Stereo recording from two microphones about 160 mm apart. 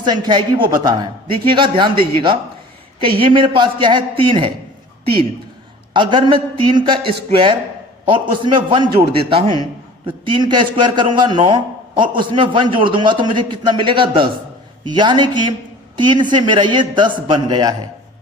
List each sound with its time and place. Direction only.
0.0 s a man's voice: 30° right (ahead or behind)
5.9 s a man's voice: 30° right (ahead or behind)